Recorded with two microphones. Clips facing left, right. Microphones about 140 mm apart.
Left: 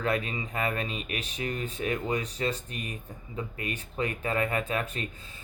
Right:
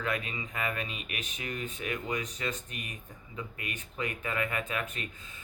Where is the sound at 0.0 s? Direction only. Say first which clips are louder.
Left 5 dB; 35° left (ahead or behind).